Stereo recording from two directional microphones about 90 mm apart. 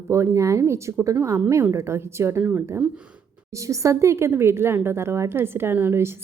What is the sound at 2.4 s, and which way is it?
Speech, 20° right (ahead or behind).